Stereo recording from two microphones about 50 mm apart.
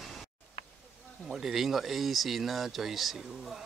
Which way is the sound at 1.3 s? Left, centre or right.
Centre.